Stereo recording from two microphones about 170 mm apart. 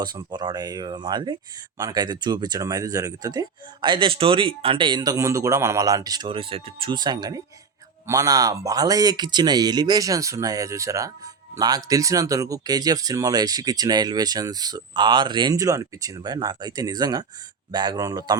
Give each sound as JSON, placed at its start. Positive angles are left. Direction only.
{"t": 0.0, "sound": "speech", "side_deg": -25}